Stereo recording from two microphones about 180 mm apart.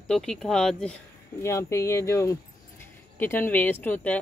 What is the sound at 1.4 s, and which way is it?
Speech, 15° left (ahead or behind).